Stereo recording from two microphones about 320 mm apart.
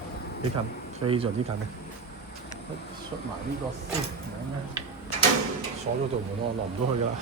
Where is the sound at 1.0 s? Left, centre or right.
Centre.